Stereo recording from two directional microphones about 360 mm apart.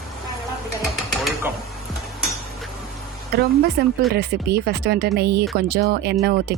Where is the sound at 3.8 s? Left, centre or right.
Right.